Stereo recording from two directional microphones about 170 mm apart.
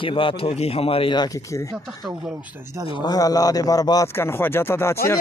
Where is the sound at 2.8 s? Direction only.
25° left (ahead or behind).